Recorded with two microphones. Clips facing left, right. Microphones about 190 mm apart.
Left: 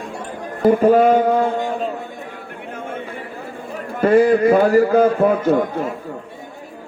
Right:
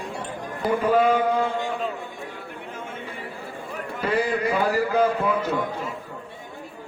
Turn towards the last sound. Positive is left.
turn(degrees=50)  # may be behind; listen again after turning